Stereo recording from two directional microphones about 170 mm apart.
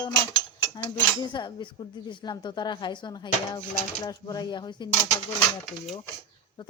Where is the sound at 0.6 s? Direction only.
25° left (ahead or behind).